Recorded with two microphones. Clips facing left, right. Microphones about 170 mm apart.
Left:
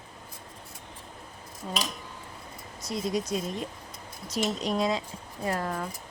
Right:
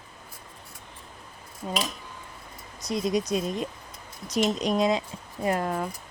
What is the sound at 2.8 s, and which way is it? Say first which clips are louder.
Speech: right 4 dB; 20° right (ahead or behind).